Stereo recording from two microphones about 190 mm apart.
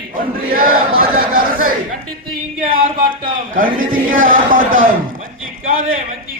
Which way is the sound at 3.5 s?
45° right (ahead or behind).